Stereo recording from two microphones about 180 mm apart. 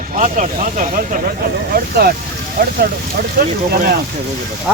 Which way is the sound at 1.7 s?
60° right (ahead or behind).